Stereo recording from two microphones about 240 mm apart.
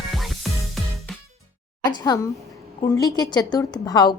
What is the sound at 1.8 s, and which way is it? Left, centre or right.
A woman's voice, centre.